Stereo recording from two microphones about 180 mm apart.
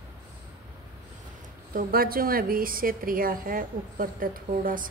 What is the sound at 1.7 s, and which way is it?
A woman's voice, 55° right (ahead or behind).